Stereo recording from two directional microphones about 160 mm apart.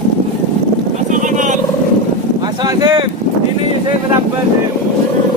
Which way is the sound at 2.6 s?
25° right (ahead or behind).